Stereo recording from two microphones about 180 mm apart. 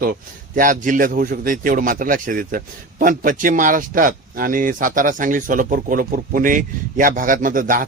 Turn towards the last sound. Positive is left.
turn(degrees=-50)  # may be behind; listen again after turning